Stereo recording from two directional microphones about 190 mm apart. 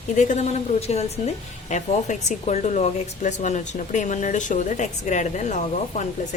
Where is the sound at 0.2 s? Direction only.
40° left (ahead or behind).